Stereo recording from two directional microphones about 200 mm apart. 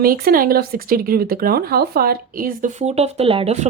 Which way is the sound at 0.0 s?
45° right (ahead or behind).